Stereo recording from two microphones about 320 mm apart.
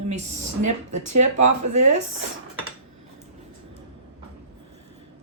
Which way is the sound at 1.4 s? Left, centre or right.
Right.